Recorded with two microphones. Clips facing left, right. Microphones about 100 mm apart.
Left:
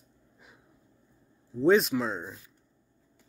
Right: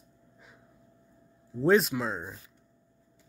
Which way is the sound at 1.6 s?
Centre (ahead or behind).